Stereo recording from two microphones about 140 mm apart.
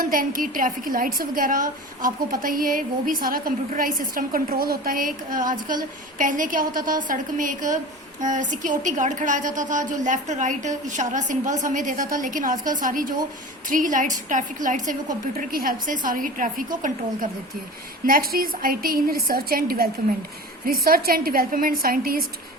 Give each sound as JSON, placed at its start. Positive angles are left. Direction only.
{"t": 0.0, "sound": "a woman's voice", "side_deg": -85}
{"t": 15.4, "sound": "a woman's voice", "side_deg": -85}
{"t": 18.0, "sound": "a woman's voice", "side_deg": -90}